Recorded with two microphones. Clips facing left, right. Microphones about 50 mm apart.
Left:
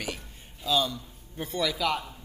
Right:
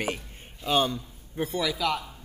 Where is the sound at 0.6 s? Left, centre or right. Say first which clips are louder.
Right 2 dB; right.